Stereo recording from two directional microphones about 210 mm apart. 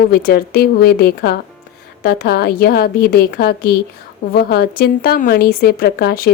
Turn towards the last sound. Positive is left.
turn(degrees=50)  # may be behind; listen again after turning